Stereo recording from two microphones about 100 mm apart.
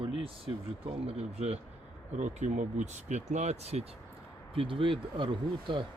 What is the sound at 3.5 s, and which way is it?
Speech, 90° right.